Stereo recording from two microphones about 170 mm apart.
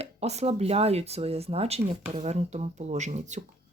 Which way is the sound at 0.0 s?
40° right (ahead or behind).